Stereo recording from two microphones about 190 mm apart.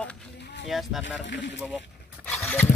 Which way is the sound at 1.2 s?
70° left (ahead or behind).